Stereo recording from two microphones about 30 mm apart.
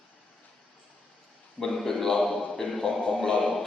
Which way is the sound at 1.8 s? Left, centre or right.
Centre.